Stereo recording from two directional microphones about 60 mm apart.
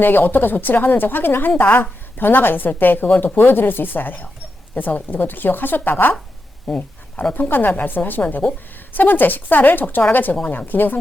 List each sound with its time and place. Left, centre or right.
0.0 s a woman's voice: left
6.7 s speech: centre
7.3 s a woman's voice: left
8.4 s speech: centre
8.9 s a woman's voice: left